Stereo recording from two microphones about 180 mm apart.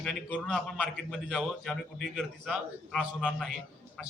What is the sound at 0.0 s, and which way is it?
A man's voice, centre (ahead or behind).